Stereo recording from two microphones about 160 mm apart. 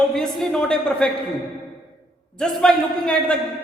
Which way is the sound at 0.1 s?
Centre (ahead or behind).